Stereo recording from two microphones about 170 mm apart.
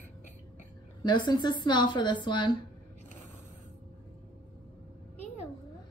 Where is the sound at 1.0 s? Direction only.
25° left (ahead or behind).